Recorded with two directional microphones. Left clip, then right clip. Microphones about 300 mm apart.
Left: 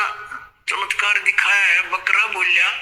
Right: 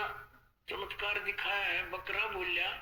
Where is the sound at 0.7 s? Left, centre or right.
Centre.